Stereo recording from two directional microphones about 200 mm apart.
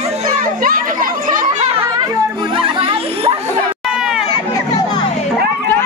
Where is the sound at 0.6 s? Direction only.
45° right (ahead or behind).